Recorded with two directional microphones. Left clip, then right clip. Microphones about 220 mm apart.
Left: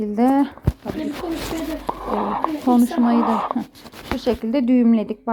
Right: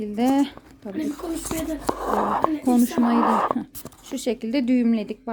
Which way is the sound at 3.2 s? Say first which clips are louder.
Even; 45° right (ahead or behind).